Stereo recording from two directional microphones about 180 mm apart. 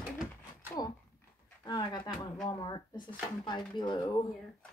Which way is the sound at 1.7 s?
25° left (ahead or behind).